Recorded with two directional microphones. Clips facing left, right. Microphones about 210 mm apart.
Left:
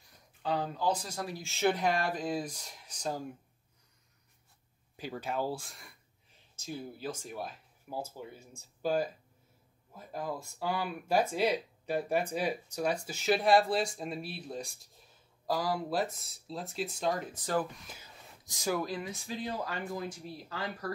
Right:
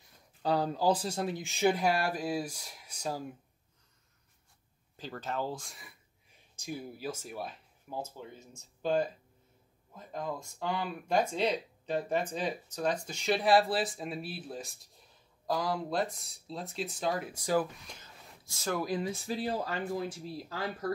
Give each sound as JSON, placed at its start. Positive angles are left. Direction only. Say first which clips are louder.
{"t": 0.4, "sound": "speech", "louder": "right 3 dB", "side_deg": -40}
{"t": 4.9, "sound": "speech", "louder": "left 1 dB", "side_deg": 10}
{"t": 6.5, "sound": "speech", "louder": "right 1 dB", "side_deg": -10}
{"t": 17.7, "sound": "speech", "louder": "even", "side_deg": 5}
{"t": 18.4, "sound": "a sound", "louder": "left 2 dB", "side_deg": 15}
{"t": 18.9, "sound": "speech", "louder": "right 5 dB", "side_deg": -30}